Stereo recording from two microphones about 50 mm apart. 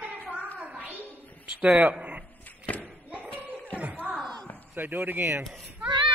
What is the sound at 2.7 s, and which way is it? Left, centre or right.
Slam, left.